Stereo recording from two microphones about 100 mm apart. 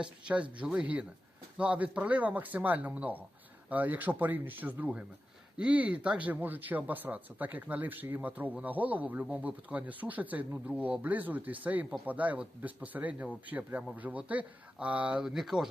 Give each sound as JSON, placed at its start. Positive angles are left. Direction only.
{"t": 0.0, "sound": "speech", "side_deg": -10}